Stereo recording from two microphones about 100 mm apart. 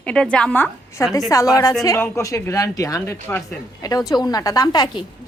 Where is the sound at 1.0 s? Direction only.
30° left (ahead or behind).